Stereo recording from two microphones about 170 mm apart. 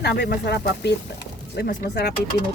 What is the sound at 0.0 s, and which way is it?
Speech, 80° left.